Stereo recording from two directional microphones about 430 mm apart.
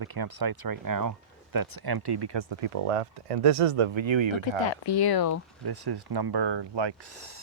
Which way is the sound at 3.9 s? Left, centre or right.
Right.